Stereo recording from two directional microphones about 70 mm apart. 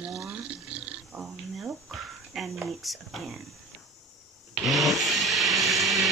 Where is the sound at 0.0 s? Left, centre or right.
Centre.